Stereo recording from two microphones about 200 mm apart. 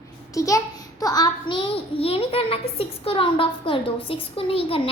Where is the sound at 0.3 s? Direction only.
15° left (ahead or behind).